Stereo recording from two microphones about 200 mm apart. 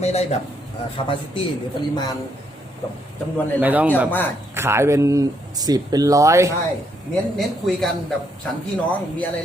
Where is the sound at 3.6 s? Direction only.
10° right (ahead or behind).